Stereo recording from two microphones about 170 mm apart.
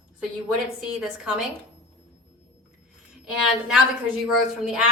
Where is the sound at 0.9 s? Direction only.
5° right (ahead or behind).